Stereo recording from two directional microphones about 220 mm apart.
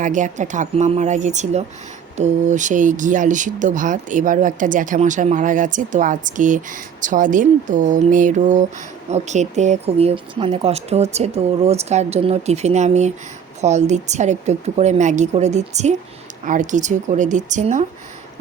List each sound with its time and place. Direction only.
0.0 s speech: 35° right (ahead or behind)